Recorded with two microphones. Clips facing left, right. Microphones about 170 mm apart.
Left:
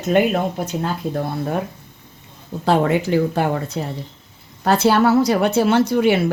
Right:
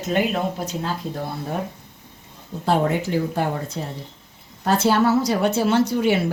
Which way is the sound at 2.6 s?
80° left.